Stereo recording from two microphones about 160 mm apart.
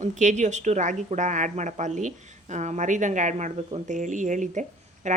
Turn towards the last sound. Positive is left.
turn(degrees=-50)  # may be behind; listen again after turning